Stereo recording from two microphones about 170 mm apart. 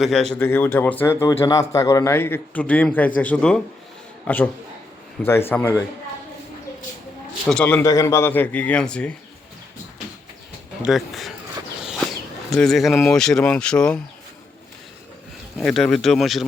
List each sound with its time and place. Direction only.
0.0 s speech: centre (ahead or behind)
0.4 s speech: 15° left (ahead or behind)
7.4 s speech: 5° left (ahead or behind)
10.8 s speech: centre (ahead or behind)
11.8 s a sound: 5° right (ahead or behind)
12.5 s speech: centre (ahead or behind)
15.5 s speech: centre (ahead or behind)